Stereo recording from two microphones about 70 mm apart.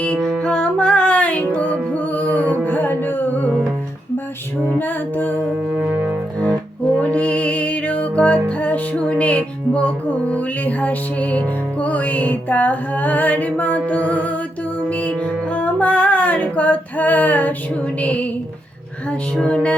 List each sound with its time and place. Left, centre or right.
0.0 s music: centre; by 3.2 s left
4.6 s music: left
5.9 s music: right
7.0 s music: centre
18.0 s a sound: centre
19.4 s music: centre